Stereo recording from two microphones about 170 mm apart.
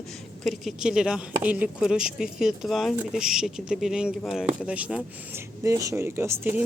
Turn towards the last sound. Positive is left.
turn(degrees=-10)  # may be behind; listen again after turning